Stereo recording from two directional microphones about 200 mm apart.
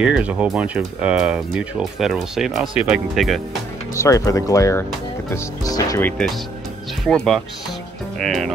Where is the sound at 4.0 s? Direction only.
15° left (ahead or behind).